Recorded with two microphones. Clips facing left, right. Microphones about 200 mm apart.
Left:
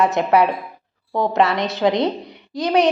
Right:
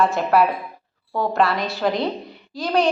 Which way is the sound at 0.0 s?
20° left (ahead or behind).